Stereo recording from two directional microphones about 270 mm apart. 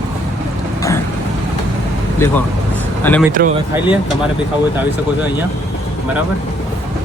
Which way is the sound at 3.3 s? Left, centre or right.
Right.